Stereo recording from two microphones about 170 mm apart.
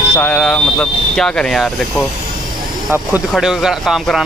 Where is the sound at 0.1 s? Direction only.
5° left (ahead or behind).